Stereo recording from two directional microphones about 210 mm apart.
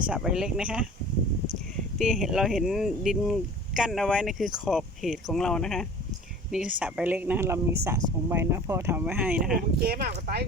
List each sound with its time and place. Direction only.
0.0 s speech: 5° right (ahead or behind)
2.0 s speech: centre (ahead or behind)
9.6 s speech: 45° right (ahead or behind)